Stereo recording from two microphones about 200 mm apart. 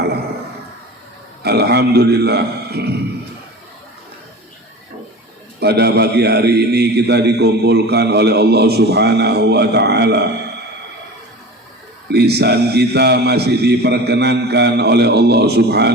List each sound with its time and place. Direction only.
1.4 s a man's voice: 55° right (ahead or behind)
5.5 s a man's voice: 55° right (ahead or behind)
12.0 s a man's voice: 55° right (ahead or behind)